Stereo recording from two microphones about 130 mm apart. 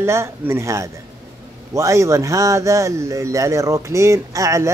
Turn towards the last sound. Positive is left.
turn(degrees=-25)  # may be behind; listen again after turning